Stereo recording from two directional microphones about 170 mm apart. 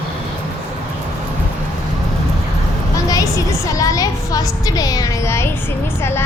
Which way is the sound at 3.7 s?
20° left (ahead or behind).